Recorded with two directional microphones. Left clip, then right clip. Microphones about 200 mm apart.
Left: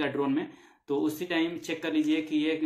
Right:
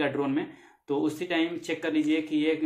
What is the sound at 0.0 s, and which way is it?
Speech, 5° right (ahead or behind).